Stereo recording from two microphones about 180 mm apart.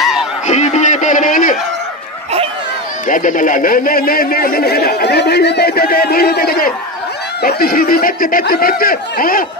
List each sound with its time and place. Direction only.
0.0 s honk: 5° right (ahead or behind)
0.5 s a sound: 40° left (ahead or behind)
3.1 s speech: 45° left (ahead or behind)